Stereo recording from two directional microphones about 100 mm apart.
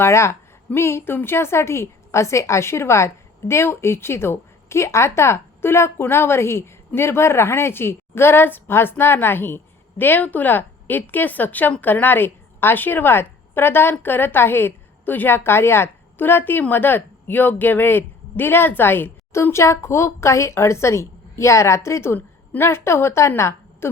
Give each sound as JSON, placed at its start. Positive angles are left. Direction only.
{"t": 0.0, "sound": "a woman's voice", "side_deg": 25}